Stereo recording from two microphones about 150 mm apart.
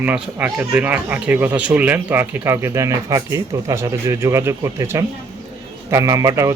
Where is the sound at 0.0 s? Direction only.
10° right (ahead or behind).